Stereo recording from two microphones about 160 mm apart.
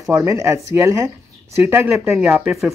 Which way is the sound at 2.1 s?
Centre (ahead or behind).